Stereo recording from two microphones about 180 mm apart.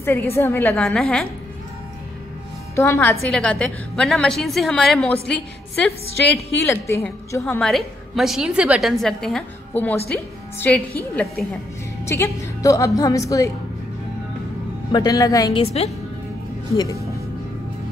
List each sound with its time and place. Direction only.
0.0 s a woman's voice: 15° left (ahead or behind)
2.7 s a woman's voice: 15° left (ahead or behind)
6.2 s a woman's voice: 70° left (ahead or behind)
6.7 s a woman's voice: 15° left (ahead or behind)
7.6 s a woman's voice: centre (ahead or behind)
12.0 s a woman's voice: 15° left (ahead or behind)
14.9 s a woman's voice: 20° left (ahead or behind)
15.6 s a woman's voice: 35° left (ahead or behind)